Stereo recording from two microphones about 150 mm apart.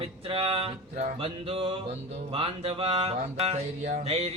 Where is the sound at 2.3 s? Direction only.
40° right (ahead or behind).